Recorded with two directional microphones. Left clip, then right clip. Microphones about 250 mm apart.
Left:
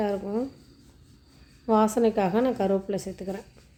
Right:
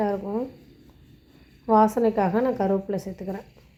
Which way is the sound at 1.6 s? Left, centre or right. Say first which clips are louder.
Right 3 dB; centre.